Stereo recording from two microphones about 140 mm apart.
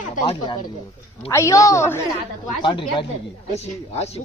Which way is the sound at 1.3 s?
20° left (ahead or behind).